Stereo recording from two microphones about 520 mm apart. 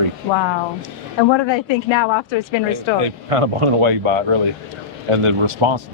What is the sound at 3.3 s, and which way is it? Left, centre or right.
A man's voice, right.